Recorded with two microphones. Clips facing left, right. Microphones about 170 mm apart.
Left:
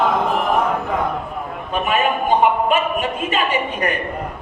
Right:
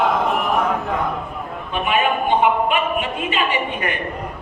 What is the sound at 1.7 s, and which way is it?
A woman's voice, 40° left (ahead or behind).